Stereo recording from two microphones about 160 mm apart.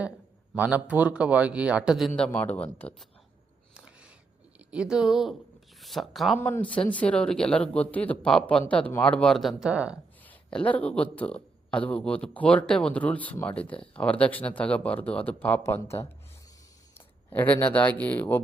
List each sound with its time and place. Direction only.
0.5 s a man's voice: 10° right (ahead or behind); by 3.1 s 10° left (ahead or behind)
4.7 s a woman's voice: 5° right (ahead or behind)
10.2 s speech: 10° left (ahead or behind)
17.2 s speech: 10° left (ahead or behind)